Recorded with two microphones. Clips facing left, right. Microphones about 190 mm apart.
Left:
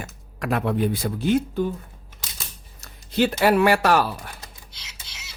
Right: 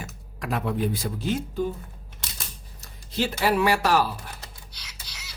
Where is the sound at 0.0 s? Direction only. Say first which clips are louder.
Left 4 dB; 60° left (ahead or behind).